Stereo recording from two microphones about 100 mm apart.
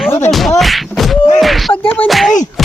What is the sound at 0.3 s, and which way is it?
Beatboxing, centre (ahead or behind).